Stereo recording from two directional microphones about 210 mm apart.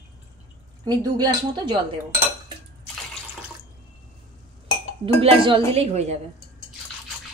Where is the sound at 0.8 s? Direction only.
20° right (ahead or behind).